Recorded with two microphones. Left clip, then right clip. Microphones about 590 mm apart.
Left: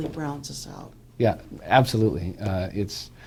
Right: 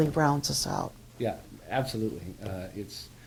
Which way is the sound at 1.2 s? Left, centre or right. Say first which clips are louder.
Left 9 dB; left.